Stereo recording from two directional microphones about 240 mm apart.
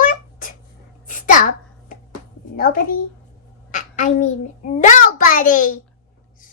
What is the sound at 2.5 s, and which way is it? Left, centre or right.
Speech, left.